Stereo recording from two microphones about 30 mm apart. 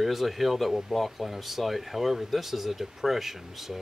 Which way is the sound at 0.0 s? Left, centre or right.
Centre.